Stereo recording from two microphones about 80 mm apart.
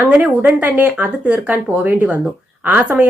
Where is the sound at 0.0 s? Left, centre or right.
Centre.